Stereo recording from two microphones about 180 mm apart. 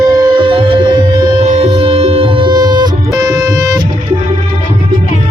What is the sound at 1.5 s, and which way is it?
Music, 40° right (ahead or behind).